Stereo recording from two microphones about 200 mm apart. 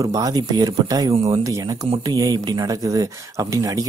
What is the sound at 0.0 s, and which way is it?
Speech, 15° right (ahead or behind).